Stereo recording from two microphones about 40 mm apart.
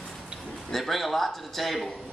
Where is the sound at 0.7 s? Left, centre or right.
Centre.